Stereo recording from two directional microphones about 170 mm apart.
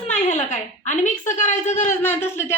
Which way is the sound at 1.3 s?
45° left (ahead or behind).